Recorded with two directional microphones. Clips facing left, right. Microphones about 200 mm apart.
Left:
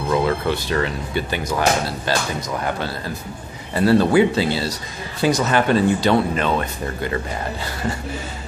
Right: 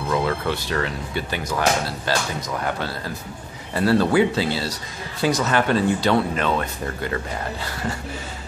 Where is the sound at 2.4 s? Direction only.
10° left (ahead or behind).